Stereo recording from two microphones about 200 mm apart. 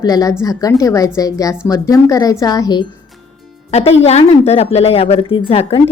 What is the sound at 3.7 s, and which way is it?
Speech, 30° left (ahead or behind).